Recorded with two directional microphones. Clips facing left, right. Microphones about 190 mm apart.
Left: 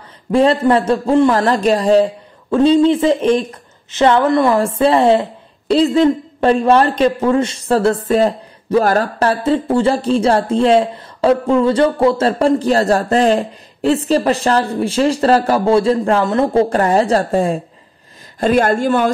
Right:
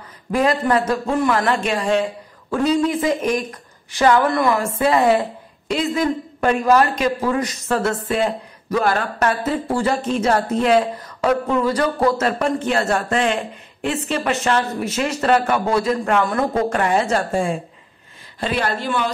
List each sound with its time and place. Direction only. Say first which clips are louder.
0.3 s a woman's voice: left 6 dB; 30° left (ahead or behind); by 19.1 s 50° left (ahead or behind)